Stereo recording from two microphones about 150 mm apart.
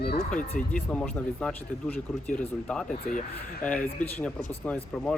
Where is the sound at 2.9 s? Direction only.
60° left (ahead or behind).